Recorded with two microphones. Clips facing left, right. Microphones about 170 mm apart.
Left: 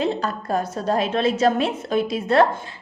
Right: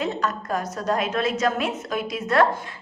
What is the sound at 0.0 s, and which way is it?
A woman's voice, 30° left (ahead or behind).